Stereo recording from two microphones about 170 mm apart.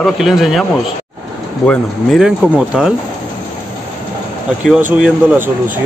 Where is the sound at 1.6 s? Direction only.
Centre (ahead or behind).